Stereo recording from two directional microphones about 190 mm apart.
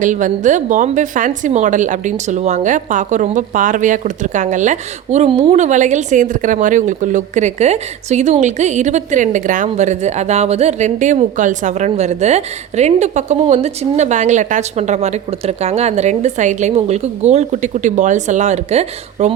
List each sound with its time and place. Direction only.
0.0 s a woman's voice: 40° right (ahead or behind)